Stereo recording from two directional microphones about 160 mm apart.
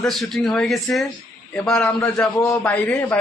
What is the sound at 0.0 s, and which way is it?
A man's voice, centre (ahead or behind).